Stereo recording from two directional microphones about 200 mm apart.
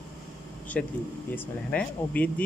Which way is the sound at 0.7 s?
10° left (ahead or behind).